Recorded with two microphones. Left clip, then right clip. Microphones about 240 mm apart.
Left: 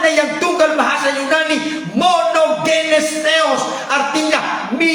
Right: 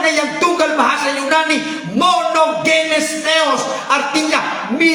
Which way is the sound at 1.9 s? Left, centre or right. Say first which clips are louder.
Even; centre.